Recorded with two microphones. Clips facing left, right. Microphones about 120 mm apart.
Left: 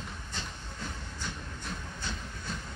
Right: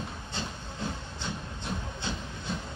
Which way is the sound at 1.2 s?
25° right (ahead or behind).